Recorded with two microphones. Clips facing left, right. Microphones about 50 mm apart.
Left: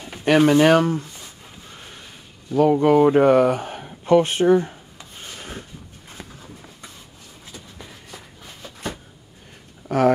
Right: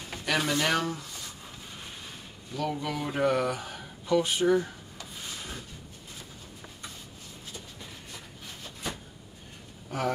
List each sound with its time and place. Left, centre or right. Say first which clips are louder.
0.2 s speech: left 13 dB; left
2.5 s speech: left 16 dB; left
5.2 s rub: left 5 dB; left
9.8 s speech: left 13 dB; left